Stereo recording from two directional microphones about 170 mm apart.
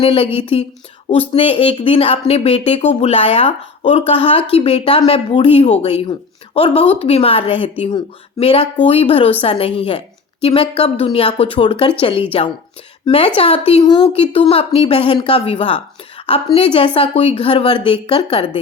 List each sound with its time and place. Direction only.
0.0 s speech: 35° left (ahead or behind)